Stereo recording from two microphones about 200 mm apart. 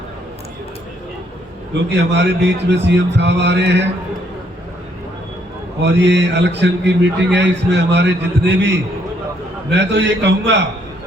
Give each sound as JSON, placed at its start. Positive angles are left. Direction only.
{"t": 1.9, "sound": "a man's voice", "side_deg": -60}
{"t": 5.8, "sound": "a man's voice", "side_deg": -60}